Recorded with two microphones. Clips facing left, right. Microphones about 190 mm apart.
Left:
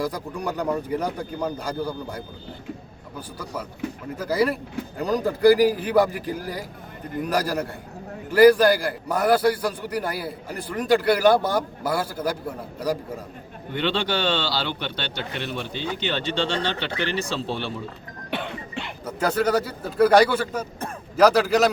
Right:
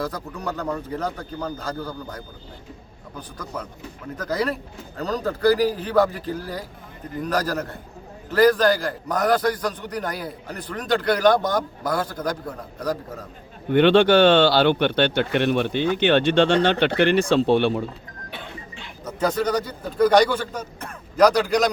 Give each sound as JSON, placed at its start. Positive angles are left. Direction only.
{"t": 0.0, "sound": "a man's voice", "side_deg": 10}
{"t": 13.7, "sound": "speech", "side_deg": -55}
{"t": 18.3, "sound": "cough", "side_deg": 75}
{"t": 19.0, "sound": "a man's voice", "side_deg": 10}